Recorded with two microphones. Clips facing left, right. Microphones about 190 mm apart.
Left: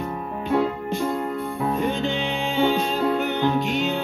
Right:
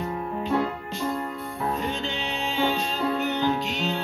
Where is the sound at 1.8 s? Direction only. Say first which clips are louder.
Left 6 dB; 55° left (ahead or behind).